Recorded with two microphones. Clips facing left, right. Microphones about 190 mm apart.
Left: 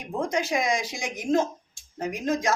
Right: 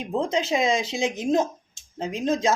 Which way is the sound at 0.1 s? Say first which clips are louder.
Right 2 dB; 25° right (ahead or behind).